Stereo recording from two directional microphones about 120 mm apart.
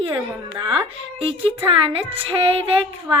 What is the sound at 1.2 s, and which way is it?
Music, 50° right (ahead or behind).